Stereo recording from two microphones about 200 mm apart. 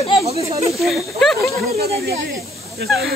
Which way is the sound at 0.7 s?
Centre (ahead or behind).